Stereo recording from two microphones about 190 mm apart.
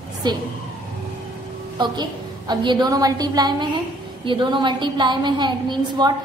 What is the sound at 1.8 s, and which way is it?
A woman's voice, 20° right (ahead or behind).